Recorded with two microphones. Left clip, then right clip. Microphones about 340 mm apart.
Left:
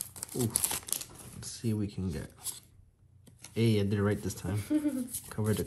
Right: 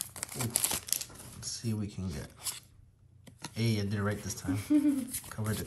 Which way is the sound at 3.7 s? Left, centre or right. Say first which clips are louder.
Left 4 dB; centre.